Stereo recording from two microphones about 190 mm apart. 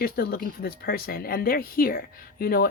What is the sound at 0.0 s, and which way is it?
Speech, 55° left (ahead or behind).